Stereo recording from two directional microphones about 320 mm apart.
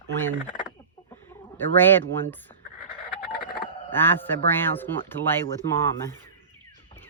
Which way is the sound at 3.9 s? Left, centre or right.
Centre.